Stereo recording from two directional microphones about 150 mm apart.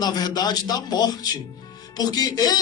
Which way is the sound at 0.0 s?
25° left (ahead or behind).